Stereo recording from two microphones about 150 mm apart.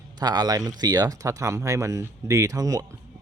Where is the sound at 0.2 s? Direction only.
25° right (ahead or behind).